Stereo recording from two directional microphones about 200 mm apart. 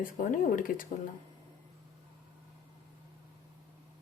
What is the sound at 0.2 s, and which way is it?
Speech, 45° left (ahead or behind).